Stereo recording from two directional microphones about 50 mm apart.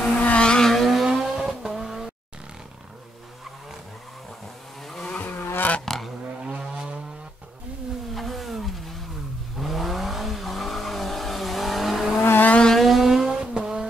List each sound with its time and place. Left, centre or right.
0.2 s vehicle: left
0.5 s vehicle: centre
5.2 s vehicle: left
5.9 s a sound: centre
6.4 s vehicle: centre
8.1 s vehicle: centre
12.2 s vehicle: left
12.7 s vehicle: centre
13.4 s vehicle: centre